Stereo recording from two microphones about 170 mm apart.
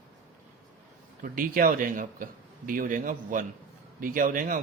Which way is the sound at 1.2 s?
55° right (ahead or behind).